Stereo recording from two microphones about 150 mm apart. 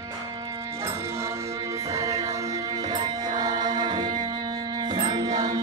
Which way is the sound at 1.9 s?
20° right (ahead or behind).